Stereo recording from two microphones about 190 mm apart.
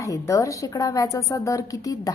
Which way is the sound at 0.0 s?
15° left (ahead or behind).